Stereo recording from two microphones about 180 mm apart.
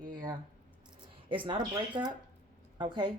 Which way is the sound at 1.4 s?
25° right (ahead or behind).